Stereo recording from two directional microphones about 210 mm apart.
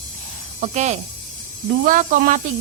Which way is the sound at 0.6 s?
35° right (ahead or behind).